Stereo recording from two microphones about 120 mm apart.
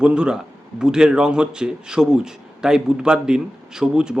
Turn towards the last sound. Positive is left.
turn(degrees=-5)  # may be behind; listen again after turning